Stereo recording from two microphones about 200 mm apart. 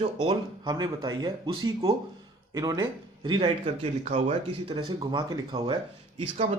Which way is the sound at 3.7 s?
40° right (ahead or behind).